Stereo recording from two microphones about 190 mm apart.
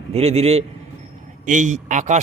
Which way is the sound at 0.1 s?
35° right (ahead or behind).